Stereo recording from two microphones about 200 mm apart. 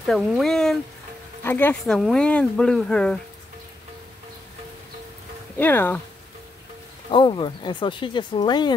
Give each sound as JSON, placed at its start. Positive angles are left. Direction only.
{"t": 0.0, "sound": "speech", "side_deg": 0}
{"t": 5.6, "sound": "speech", "side_deg": 10}
{"t": 7.1, "sound": "speech", "side_deg": 25}